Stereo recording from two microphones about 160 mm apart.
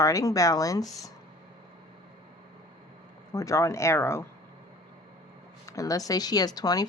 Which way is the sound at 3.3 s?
20° left (ahead or behind).